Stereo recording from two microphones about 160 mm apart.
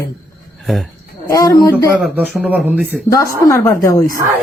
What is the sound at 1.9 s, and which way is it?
Speech, 10° right (ahead or behind).